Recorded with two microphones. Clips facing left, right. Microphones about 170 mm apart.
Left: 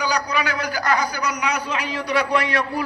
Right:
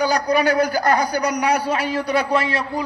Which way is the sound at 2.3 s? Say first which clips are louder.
Right 1 dB; 25° right (ahead or behind).